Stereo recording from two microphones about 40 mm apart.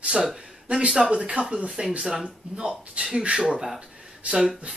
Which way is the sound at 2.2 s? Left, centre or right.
Right.